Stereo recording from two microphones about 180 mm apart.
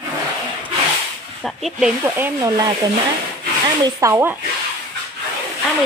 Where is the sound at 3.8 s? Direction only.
15° right (ahead or behind).